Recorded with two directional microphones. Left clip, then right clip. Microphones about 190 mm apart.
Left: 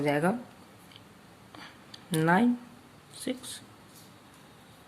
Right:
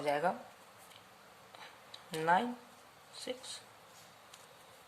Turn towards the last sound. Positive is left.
turn(degrees=15)  # may be behind; listen again after turning